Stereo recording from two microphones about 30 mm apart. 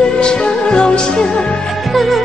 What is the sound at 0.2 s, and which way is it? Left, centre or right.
Music, left.